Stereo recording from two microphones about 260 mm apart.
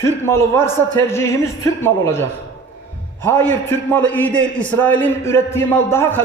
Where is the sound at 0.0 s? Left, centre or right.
Centre.